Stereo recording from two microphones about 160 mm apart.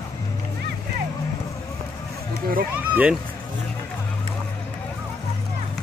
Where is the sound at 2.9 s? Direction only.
10° right (ahead or behind).